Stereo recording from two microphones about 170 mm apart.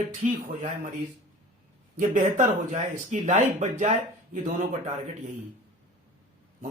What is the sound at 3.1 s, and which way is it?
Speech, 45° right (ahead or behind).